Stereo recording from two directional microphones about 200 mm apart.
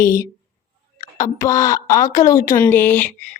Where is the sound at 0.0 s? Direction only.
15° left (ahead or behind).